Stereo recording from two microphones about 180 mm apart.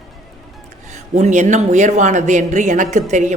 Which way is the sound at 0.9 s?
40° right (ahead or behind).